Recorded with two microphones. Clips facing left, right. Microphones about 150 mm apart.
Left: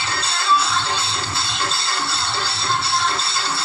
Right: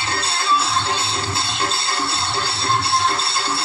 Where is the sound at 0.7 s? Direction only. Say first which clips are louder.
Right 1 dB; 55° right (ahead or behind).